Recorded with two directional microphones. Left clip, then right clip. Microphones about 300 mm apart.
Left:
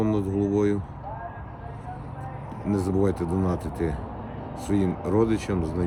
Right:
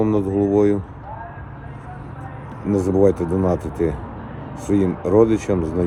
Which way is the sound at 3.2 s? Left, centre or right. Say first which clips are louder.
Right 6 dB; right.